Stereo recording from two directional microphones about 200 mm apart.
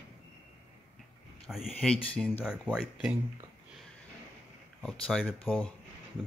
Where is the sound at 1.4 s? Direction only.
Centre (ahead or behind).